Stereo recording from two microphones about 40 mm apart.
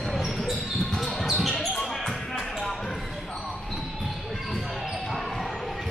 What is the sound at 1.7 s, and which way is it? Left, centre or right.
Basketball bounce, centre.